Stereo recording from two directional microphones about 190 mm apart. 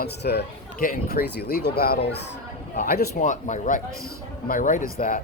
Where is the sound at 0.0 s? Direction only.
60° left (ahead or behind).